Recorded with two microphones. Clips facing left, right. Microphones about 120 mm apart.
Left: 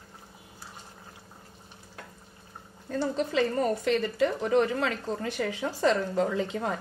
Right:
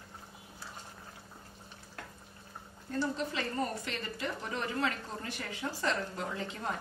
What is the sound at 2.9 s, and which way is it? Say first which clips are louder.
A woman's voice: left 5 dB; 90° left.